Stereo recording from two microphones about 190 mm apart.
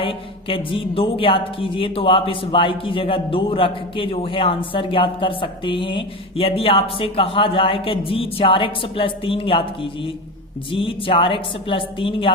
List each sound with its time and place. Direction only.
0.0 s speech: 30° left (ahead or behind)